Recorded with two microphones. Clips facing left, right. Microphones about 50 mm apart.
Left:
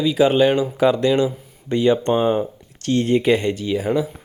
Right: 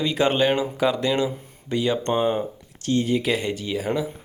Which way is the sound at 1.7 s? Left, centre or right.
Left.